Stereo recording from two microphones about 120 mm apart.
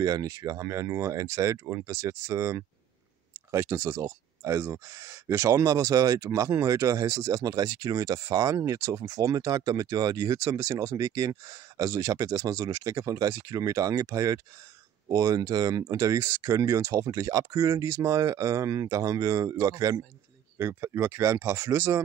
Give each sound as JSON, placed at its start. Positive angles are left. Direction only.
{"t": 0.0, "sound": "speech", "side_deg": -30}